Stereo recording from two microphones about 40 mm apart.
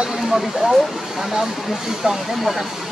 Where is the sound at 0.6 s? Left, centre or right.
Centre.